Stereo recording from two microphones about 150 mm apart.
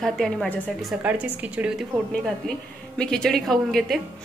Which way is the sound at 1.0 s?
10° right (ahead or behind).